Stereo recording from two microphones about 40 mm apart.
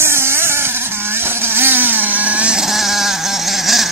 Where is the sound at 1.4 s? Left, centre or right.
Right.